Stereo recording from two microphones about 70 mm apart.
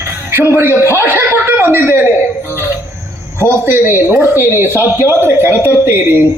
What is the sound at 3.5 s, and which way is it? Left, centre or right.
A man's voice, right.